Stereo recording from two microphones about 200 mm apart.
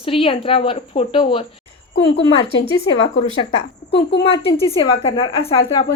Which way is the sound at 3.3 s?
30° left (ahead or behind).